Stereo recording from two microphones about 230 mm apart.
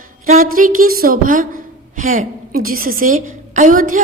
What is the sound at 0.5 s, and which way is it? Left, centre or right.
A woman's voice, right.